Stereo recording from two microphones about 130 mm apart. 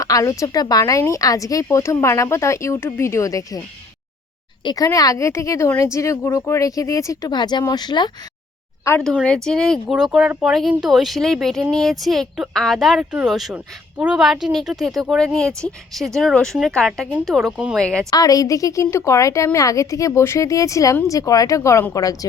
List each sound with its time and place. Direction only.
0.0 s speech: 25° left (ahead or behind)
4.6 s speech: 30° left (ahead or behind)
9.2 s speech: 5° left (ahead or behind)
18.1 s speech: 30° left (ahead or behind)